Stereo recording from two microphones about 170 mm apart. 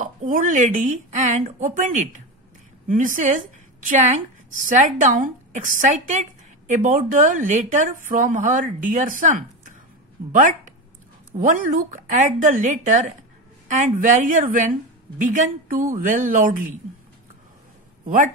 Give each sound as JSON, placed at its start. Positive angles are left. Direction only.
{"t": 0.0, "sound": "a woman's voice", "side_deg": -50}
{"t": 18.0, "sound": "speech", "side_deg": -50}